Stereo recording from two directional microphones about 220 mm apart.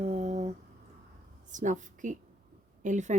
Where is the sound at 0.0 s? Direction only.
30° right (ahead or behind).